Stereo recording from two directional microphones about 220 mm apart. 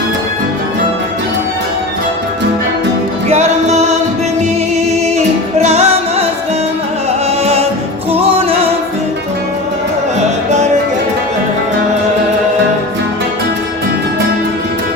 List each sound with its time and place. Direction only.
3.2 s music: 30° right (ahead or behind)
5.6 s music: 30° right (ahead or behind)
7.4 s music: 30° right (ahead or behind)